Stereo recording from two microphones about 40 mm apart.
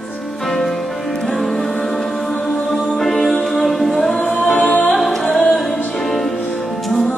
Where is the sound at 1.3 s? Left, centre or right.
Centre.